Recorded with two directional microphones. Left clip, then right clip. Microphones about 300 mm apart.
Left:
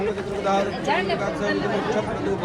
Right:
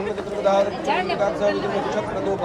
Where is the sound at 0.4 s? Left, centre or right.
Centre.